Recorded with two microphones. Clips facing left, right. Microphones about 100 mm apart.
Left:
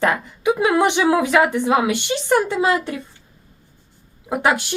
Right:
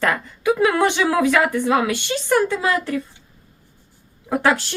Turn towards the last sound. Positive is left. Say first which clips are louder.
# even
turn(degrees=15)  # may be behind; listen again after turning